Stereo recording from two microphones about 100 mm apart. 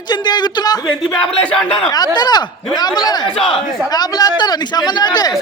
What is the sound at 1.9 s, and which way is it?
A man's voice, 45° left (ahead or behind).